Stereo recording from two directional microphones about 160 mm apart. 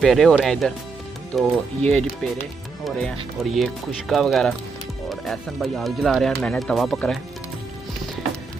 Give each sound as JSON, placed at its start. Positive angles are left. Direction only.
{"t": 0.0, "sound": "speech", "side_deg": 0}